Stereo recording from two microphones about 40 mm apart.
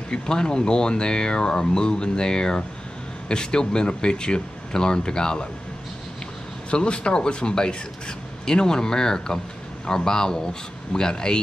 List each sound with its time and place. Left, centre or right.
0.1 s speech: left
6.7 s speech: left